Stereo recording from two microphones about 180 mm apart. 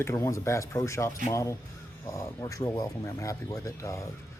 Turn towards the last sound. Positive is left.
turn(degrees=15)  # may be behind; listen again after turning